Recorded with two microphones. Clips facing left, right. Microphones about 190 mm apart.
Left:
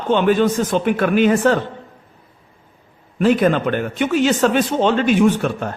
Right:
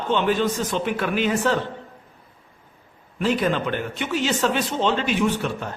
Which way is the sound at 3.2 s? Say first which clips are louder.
Left 7 dB; 55° left (ahead or behind).